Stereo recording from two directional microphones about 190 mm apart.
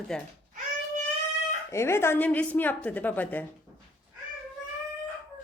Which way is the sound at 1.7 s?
15° left (ahead or behind).